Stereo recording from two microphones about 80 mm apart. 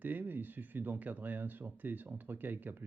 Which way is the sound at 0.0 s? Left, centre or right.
Right.